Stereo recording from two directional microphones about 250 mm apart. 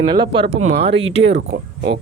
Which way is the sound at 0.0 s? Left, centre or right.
Centre.